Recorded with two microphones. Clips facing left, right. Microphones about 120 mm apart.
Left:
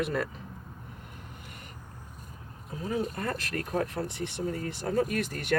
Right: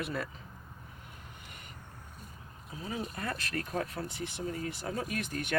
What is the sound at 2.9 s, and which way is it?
Speech, 45° left (ahead or behind).